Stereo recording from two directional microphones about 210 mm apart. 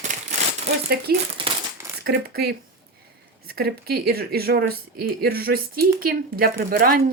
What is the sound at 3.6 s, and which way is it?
Speech, 50° right (ahead or behind).